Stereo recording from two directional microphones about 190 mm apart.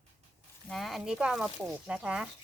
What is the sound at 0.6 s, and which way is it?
Speech, centre (ahead or behind).